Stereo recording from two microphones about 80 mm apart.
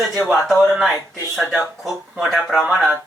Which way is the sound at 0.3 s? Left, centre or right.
Centre.